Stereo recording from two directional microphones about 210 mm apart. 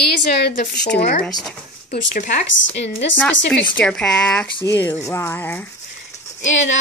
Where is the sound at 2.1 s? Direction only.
35° left (ahead or behind).